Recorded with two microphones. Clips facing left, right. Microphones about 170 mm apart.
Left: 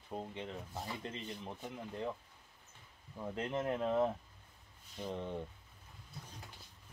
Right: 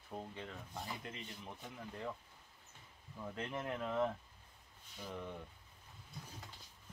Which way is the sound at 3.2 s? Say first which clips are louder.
Left 5 dB; 25° left (ahead or behind).